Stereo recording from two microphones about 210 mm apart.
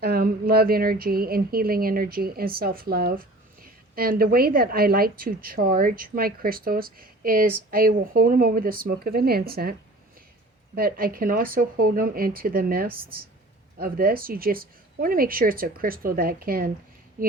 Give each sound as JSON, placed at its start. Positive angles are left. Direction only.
{"t": 0.0, "sound": "a woman's voice", "side_deg": -50}
{"t": 10.8, "sound": "a woman's voice", "side_deg": -45}